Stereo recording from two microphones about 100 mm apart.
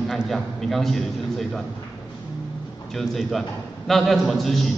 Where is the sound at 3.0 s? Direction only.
Centre (ahead or behind).